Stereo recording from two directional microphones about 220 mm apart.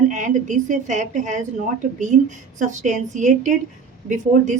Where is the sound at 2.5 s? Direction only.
35° right (ahead or behind).